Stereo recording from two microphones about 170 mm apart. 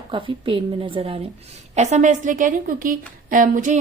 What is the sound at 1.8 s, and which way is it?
A woman's voice, 45° right (ahead or behind).